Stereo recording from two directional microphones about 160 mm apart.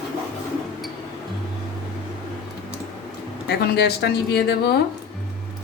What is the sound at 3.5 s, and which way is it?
Speech, 90° left.